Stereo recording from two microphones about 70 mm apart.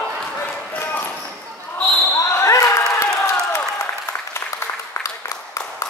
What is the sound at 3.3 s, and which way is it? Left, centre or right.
Applause, left.